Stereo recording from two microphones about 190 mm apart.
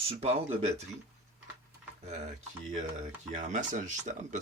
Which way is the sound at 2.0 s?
35° right (ahead or behind).